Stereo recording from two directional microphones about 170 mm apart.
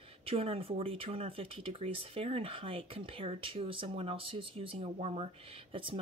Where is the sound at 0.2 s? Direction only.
35° right (ahead or behind).